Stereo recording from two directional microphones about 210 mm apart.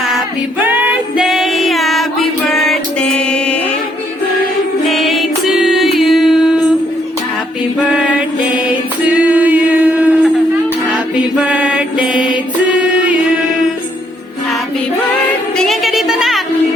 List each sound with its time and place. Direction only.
0.6 s music: 10° right (ahead or behind)
4.9 s music: centre (ahead or behind)
9.1 s a sound: 5° right (ahead or behind)
11.4 s mantra: 5° right (ahead or behind)
15.5 s music: centre (ahead or behind)